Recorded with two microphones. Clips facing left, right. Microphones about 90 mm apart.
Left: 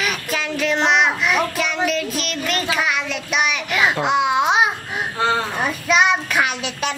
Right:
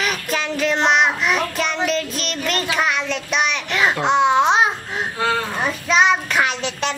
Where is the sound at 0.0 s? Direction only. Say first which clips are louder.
Right 1 dB; centre (ahead or behind).